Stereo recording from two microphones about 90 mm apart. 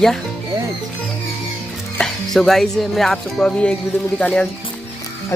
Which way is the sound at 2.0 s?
5° left (ahead or behind).